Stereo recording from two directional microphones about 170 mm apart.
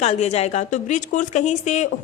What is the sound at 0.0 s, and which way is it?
A woman's voice, 40° left (ahead or behind).